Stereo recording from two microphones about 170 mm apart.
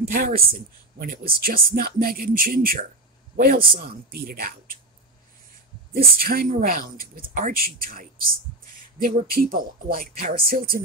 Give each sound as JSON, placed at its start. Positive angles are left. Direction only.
{"t": 0.0, "sound": "speech", "side_deg": -65}
{"t": 6.1, "sound": "speech", "side_deg": -60}